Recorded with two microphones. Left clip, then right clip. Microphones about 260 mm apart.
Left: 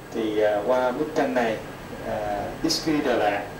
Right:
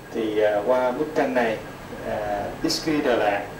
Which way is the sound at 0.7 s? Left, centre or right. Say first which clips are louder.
Right 1 dB; centre.